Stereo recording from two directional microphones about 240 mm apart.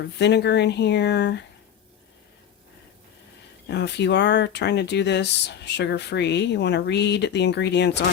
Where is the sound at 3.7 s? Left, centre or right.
Left.